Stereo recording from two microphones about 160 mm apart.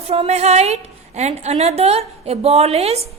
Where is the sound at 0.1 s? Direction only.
40° right (ahead or behind).